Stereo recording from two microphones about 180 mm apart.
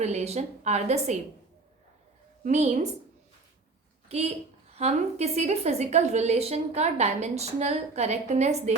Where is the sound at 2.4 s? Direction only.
40° right (ahead or behind).